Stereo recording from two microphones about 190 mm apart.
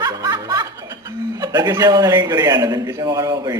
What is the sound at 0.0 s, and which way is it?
A woman's voice, 20° right (ahead or behind).